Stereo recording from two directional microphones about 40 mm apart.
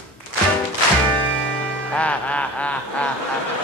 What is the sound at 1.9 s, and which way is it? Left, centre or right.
Music, left.